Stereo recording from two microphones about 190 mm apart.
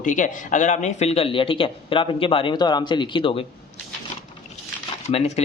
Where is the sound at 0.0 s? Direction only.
40° left (ahead or behind).